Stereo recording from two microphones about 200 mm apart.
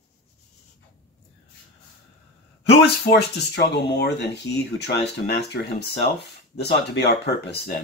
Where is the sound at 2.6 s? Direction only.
55° left (ahead or behind).